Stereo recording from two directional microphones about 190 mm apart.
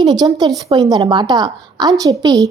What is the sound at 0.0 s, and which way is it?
A woman's voice, 20° right (ahead or behind).